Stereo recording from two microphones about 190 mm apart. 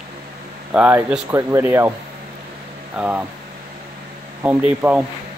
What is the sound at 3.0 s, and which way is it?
Speech, 10° right (ahead or behind).